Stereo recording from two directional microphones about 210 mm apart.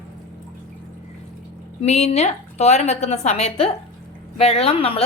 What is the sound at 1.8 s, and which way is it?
A woman's voice, 30° left (ahead or behind).